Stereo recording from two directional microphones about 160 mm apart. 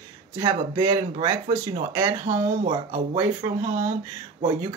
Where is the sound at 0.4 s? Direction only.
25° right (ahead or behind).